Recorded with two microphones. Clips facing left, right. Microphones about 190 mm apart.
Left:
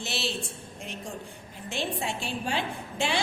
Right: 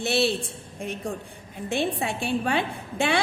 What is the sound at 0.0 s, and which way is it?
A woman's voice, 60° right (ahead or behind).